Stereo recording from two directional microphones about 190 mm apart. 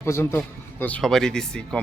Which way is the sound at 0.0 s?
15° left (ahead or behind).